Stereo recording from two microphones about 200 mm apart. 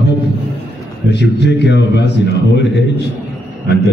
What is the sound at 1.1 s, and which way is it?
A man's voice, 60° left (ahead or behind).